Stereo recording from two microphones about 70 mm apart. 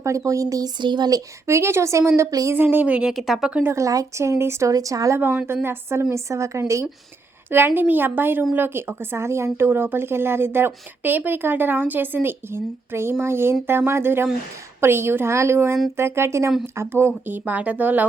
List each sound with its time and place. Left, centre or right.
0.3 s speech: right
1.5 s speech: right
2.5 s speech: right
3.1 s speech: centre
3.7 s a woman's voice: right
4.7 s a woman's voice: right
5.6 s a woman's voice: right
7.5 s speech: right